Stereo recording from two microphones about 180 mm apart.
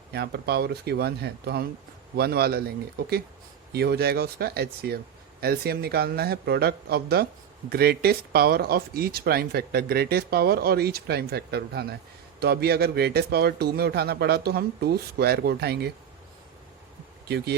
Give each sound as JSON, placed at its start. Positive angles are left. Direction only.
{"t": 0.1, "sound": "speech", "side_deg": -65}
{"t": 17.2, "sound": "speech", "side_deg": -65}